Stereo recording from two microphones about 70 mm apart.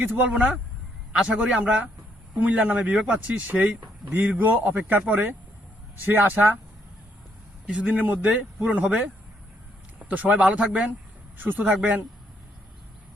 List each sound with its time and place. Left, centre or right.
0.2 s speech: centre
7.7 s speech: centre
10.0 s speech: right
11.3 s speech: right